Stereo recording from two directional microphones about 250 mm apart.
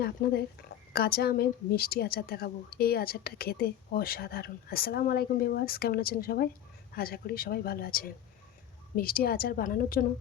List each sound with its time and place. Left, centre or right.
0.0 s a woman's voice: left